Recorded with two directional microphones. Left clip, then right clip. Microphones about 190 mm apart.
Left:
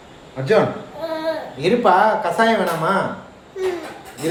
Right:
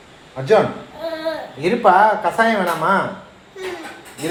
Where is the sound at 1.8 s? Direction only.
20° right (ahead or behind).